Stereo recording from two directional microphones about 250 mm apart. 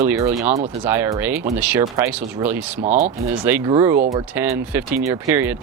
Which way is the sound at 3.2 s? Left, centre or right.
Centre.